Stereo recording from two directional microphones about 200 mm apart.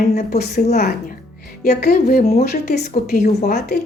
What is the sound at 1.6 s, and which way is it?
A woman's voice, 50° left (ahead or behind).